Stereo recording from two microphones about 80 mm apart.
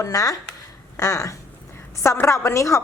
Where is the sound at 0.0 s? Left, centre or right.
Left.